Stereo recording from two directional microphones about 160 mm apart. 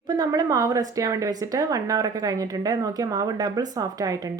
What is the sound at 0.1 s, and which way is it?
Speech, 25° right (ahead or behind).